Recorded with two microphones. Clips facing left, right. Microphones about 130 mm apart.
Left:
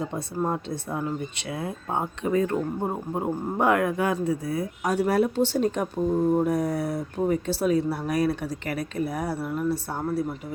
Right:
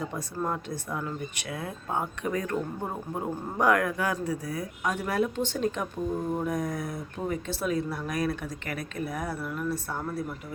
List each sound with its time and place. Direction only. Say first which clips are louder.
0.0 s speech: left 4 dB; 25° left (ahead or behind)